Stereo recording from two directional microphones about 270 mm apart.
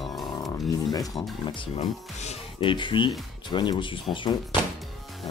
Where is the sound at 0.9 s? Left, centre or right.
Centre.